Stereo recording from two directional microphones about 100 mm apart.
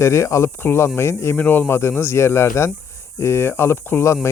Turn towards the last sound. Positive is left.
turn(degrees=30)  # may be behind; listen again after turning